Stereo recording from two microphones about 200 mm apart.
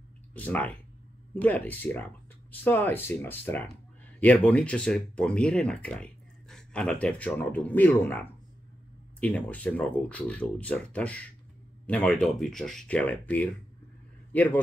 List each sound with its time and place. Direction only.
0.3 s a man's voice: 10° left (ahead or behind)